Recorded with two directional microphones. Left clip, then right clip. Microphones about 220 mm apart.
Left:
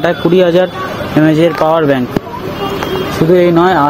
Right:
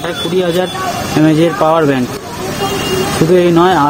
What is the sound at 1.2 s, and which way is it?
Speech, 15° left (ahead or behind).